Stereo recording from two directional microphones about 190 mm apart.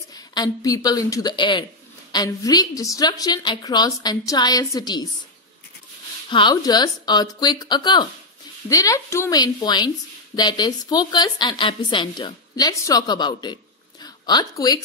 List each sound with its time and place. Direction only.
0.1 s a woman's voice: 20° left (ahead or behind)
6.3 s a woman's voice: 20° left (ahead or behind)